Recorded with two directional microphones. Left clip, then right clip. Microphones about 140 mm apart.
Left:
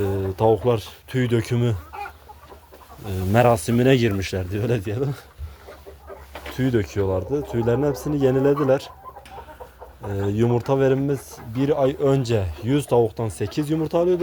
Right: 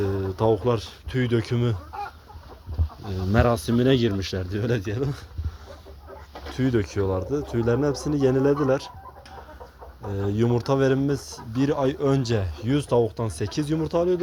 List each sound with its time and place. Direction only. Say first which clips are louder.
0.0 s speech: left 3 dB; 35° left (ahead or behind)
1.1 s speech: left 2 dB; 50° left (ahead or behind)
3.1 s speech: left 5 dB; 40° left (ahead or behind)
6.5 s speech: left 2 dB; 40° left (ahead or behind)
10.1 s speech: left 3 dB; 45° left (ahead or behind)
10.5 s speech: left 2 dB; 20° left (ahead or behind)